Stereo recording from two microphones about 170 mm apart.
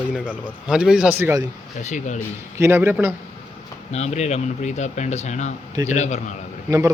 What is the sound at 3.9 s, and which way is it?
Speech, 40° left (ahead or behind).